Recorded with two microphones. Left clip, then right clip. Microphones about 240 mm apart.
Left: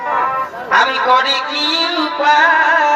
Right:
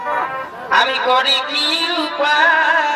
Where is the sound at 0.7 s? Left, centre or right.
Right.